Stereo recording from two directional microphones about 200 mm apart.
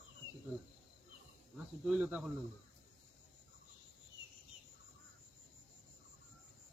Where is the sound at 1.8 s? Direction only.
5° right (ahead or behind).